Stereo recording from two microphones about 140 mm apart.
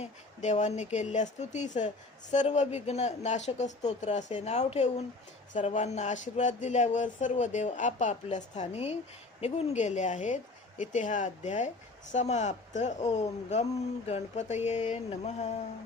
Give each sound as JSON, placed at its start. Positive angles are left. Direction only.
{"t": 0.0, "sound": "speech", "side_deg": 55}